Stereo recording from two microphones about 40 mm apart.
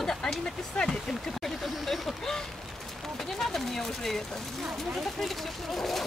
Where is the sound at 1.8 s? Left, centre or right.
Centre.